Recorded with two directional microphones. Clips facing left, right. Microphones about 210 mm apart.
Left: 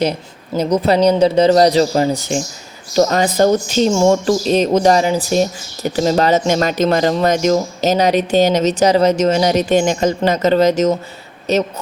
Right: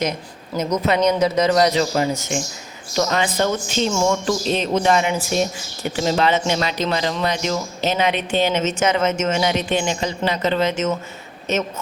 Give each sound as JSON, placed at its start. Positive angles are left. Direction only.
{"t": 0.5, "sound": "speech", "side_deg": 35}